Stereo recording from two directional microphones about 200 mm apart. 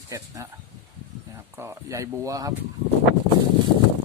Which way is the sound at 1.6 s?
15° right (ahead or behind).